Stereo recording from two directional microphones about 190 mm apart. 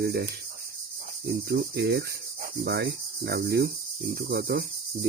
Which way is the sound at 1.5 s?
55° right (ahead or behind).